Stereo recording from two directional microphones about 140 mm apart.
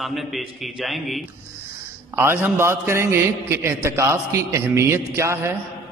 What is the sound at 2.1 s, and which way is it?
A man's voice, 15° right (ahead or behind).